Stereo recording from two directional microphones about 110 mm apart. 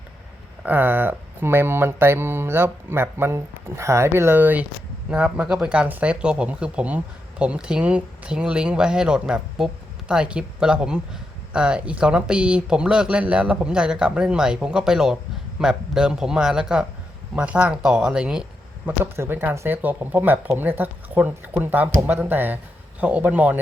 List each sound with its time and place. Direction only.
0.6 s mantra: 15° right (ahead or behind)
5.1 s speech: 10° right (ahead or behind)
19.1 s mantra: 25° right (ahead or behind)
19.5 s speech: 20° right (ahead or behind)